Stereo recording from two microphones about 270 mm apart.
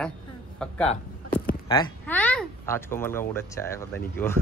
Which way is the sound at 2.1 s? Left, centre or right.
Centre.